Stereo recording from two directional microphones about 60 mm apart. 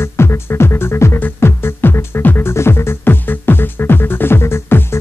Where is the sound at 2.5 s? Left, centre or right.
Left.